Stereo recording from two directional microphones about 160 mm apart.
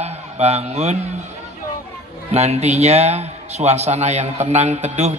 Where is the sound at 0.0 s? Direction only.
40° right (ahead or behind).